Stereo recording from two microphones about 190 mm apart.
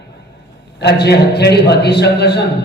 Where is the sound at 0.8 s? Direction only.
60° left (ahead or behind).